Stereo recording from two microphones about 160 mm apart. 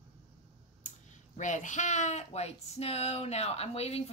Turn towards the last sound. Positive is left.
turn(degrees=40)  # may be behind; listen again after turning